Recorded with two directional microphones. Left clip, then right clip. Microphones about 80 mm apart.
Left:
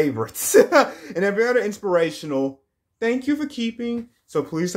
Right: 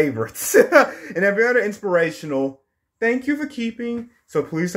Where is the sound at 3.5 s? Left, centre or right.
Left.